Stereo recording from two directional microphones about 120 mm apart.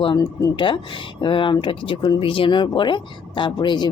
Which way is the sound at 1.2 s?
45° left (ahead or behind).